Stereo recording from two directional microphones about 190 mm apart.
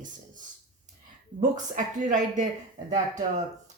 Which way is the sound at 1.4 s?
40° right (ahead or behind).